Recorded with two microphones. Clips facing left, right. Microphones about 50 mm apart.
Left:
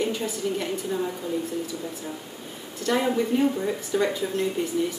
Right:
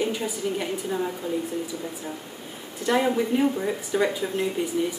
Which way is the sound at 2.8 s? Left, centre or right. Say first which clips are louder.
Right 1 dB; centre.